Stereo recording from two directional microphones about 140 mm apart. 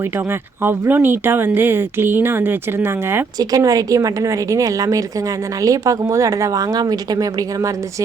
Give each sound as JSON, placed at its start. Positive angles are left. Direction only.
{"t": 0.3, "sound": "a woman's voice", "side_deg": -15}